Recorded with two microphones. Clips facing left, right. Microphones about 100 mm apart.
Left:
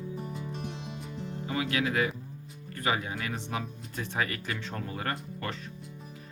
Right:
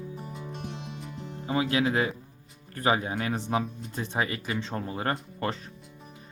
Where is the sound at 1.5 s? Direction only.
30° right (ahead or behind).